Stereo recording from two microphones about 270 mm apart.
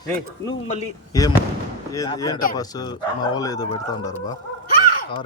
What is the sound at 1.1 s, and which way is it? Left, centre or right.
Speech, centre.